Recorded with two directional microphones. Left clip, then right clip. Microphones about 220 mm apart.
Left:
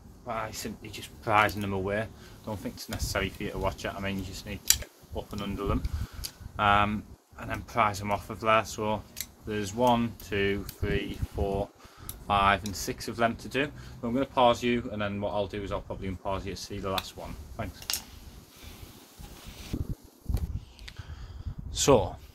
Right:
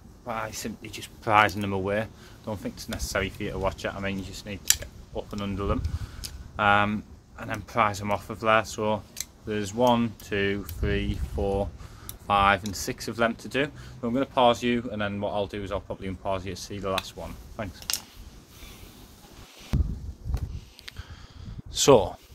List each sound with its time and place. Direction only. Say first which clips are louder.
0.2 s speech: right 2 dB; 50° right (ahead or behind)
17.9 s a sound: right 2 dB; 25° right (ahead or behind)
21.7 s speech: right 4 dB; 20° right (ahead or behind)